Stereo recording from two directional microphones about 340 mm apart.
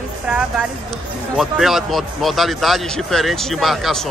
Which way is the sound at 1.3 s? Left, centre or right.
Centre.